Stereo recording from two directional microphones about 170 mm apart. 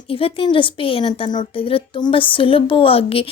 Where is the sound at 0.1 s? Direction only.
35° left (ahead or behind).